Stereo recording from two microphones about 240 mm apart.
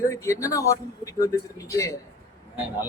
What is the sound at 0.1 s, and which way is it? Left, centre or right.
Speech, centre.